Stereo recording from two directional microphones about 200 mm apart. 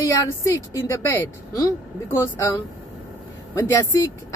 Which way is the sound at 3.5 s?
15° left (ahead or behind).